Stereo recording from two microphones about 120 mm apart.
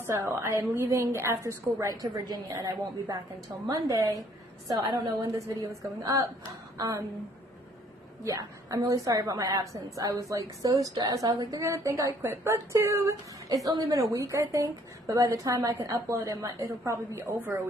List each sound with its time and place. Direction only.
0.0 s a woman's voice: 20° right (ahead or behind)
8.2 s a woman's voice: 25° right (ahead or behind)